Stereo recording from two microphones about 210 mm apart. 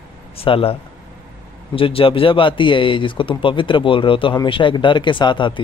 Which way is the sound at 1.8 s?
25° left (ahead or behind).